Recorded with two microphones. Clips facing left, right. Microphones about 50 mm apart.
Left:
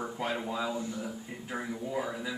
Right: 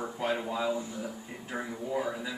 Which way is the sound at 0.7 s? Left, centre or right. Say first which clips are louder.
Right 2 dB; centre.